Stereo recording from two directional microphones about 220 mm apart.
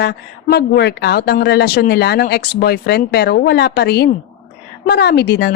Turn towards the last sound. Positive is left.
turn(degrees=45)  # may be behind; listen again after turning